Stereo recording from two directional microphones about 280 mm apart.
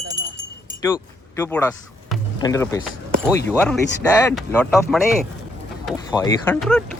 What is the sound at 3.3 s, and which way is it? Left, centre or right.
Speech, centre.